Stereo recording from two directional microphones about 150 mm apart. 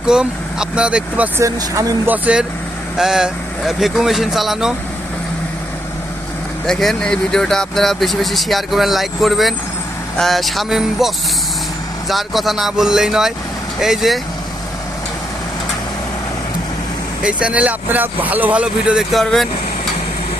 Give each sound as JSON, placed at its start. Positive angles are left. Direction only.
{"t": 0.1, "sound": "speech", "side_deg": -5}
{"t": 1.5, "sound": "speech", "side_deg": -25}
{"t": 2.0, "sound": "speech", "side_deg": -10}
{"t": 6.7, "sound": "speech", "side_deg": 5}
{"t": 17.2, "sound": "speech", "side_deg": -5}